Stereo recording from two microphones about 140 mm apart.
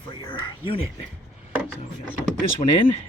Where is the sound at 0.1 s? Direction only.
35° left (ahead or behind).